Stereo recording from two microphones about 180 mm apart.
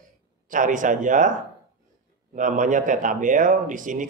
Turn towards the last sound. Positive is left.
turn(degrees=-45)  # may be behind; listen again after turning